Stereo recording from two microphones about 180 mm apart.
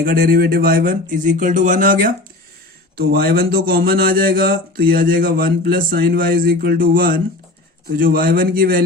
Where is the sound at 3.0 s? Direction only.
60° right (ahead or behind).